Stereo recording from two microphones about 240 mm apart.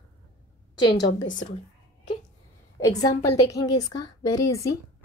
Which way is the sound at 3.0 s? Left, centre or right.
Left.